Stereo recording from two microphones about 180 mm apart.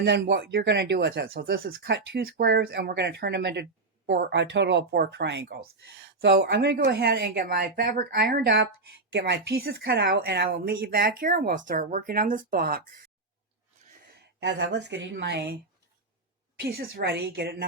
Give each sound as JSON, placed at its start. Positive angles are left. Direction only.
{"t": 0.0, "sound": "speech", "side_deg": -65}
{"t": 4.0, "sound": "speech", "side_deg": -60}
{"t": 14.3, "sound": "speech", "side_deg": -80}
{"t": 16.6, "sound": "speech", "side_deg": -60}